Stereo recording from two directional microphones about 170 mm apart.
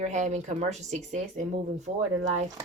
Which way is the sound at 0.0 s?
45° right (ahead or behind).